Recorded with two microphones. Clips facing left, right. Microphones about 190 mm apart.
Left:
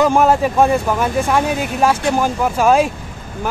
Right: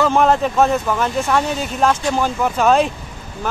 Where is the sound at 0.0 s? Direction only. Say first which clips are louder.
Left 2 dB; 10° left (ahead or behind).